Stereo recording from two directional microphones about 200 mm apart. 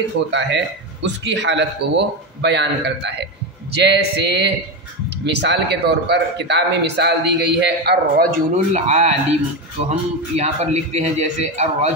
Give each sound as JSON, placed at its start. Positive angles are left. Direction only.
{"t": 0.3, "sound": "a man's voice", "side_deg": -60}